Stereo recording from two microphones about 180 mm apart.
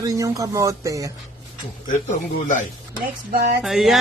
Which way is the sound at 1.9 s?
45° left (ahead or behind).